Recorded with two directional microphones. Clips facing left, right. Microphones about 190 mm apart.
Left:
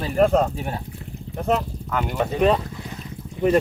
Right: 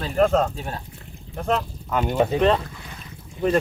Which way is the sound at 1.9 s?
20° right (ahead or behind).